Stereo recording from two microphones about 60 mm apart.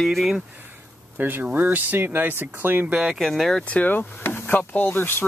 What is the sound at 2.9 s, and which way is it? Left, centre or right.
Speech, centre.